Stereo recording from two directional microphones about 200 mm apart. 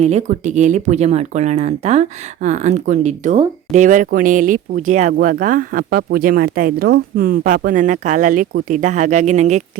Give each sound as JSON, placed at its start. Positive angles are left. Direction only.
{"t": 0.0, "sound": "speech", "side_deg": -35}